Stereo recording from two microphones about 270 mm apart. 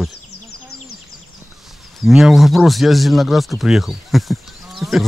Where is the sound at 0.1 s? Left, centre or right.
Left.